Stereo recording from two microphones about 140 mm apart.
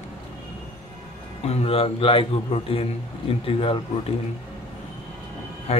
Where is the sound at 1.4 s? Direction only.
45° left (ahead or behind).